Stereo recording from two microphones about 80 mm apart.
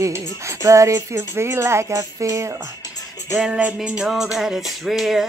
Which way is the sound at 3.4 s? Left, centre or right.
Centre.